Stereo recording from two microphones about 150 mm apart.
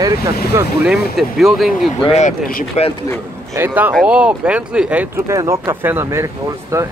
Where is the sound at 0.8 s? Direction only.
Centre (ahead or behind).